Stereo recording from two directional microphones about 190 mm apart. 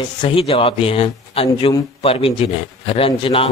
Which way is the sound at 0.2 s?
30° left (ahead or behind).